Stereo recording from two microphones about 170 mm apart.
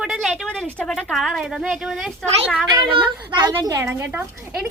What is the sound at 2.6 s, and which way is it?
Speech, 30° right (ahead or behind).